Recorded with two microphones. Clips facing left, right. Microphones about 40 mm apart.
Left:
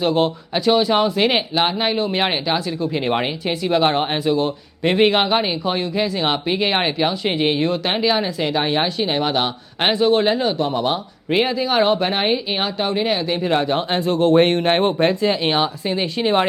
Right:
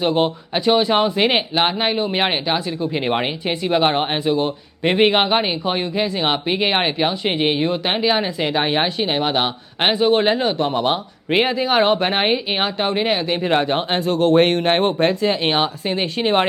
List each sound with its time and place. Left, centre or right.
0.0 s speech: centre
8.0 s speech: right
14.1 s speech: centre
14.3 s speech: centre
15.4 s speech: centre